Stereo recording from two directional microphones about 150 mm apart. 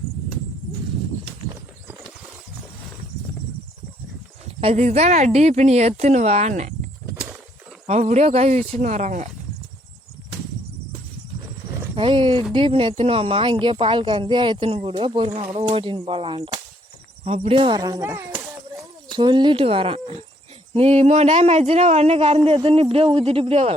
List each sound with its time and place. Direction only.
4.6 s speech: 50° right (ahead or behind)
7.9 s speech: 50° right (ahead or behind)
11.9 s speech: 35° right (ahead or behind); by 18.4 s 15° right (ahead or behind)
19.1 s speech: 30° right (ahead or behind)